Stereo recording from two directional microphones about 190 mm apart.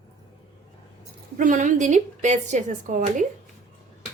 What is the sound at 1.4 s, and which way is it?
A woman's voice, 40° right (ahead or behind).